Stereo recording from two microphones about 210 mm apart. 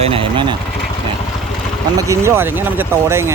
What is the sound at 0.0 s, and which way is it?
Vehicle, 25° right (ahead or behind).